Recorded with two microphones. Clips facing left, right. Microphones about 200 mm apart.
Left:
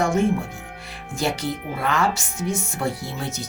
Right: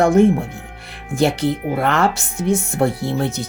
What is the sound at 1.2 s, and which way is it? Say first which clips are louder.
Speech: right 8 dB; 60° right (ahead or behind).